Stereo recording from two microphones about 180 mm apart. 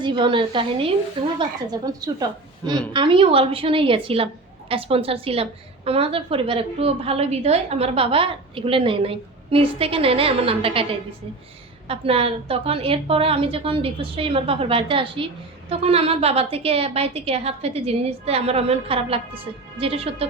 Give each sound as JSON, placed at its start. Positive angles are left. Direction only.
{"t": 0.0, "sound": "a woman's voice", "side_deg": -25}
{"t": 11.9, "sound": "a woman's voice", "side_deg": -30}